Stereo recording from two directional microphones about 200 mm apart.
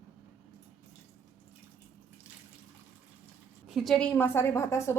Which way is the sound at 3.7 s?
Centre (ahead or behind).